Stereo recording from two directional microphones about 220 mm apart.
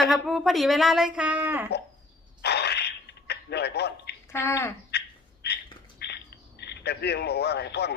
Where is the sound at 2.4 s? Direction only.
50° left (ahead or behind).